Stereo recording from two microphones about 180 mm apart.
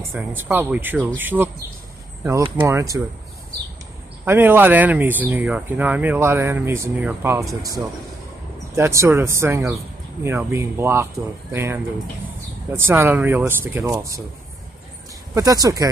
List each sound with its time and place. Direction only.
0.4 s speech: 10° right (ahead or behind)
4.2 s speech: 10° right (ahead or behind)
8.7 s speech: 15° right (ahead or behind)
15.3 s speech: 20° right (ahead or behind)